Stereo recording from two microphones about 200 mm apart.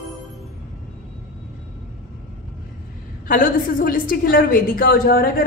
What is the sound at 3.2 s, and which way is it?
A woman's voice, 45° left (ahead or behind).